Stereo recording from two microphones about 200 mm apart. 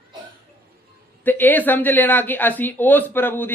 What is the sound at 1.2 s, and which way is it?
Speech, 10° left (ahead or behind).